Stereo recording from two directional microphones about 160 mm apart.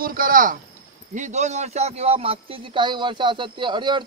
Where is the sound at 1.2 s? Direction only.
45° right (ahead or behind).